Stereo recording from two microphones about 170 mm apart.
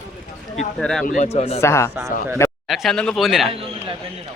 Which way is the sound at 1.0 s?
45° left (ahead or behind).